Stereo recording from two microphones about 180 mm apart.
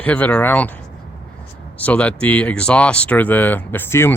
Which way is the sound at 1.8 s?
10° left (ahead or behind).